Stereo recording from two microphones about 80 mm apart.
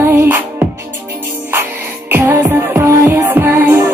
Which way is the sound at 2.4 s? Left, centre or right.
Right.